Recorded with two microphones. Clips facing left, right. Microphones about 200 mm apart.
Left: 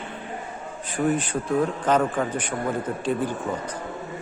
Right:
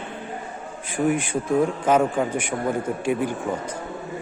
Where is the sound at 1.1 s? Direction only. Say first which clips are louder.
Right 2 dB; 10° right (ahead or behind).